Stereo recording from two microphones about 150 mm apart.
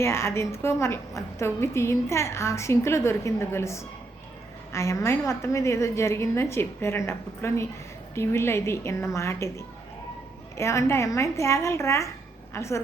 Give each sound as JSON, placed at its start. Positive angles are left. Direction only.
{"t": 0.0, "sound": "a woman's voice", "side_deg": 20}